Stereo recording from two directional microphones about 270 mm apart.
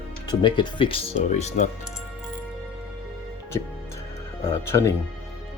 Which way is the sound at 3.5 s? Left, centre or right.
Centre.